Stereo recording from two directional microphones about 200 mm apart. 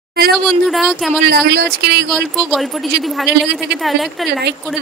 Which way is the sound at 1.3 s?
55° right (ahead or behind).